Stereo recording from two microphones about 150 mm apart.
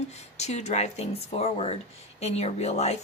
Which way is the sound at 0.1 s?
45° left (ahead or behind).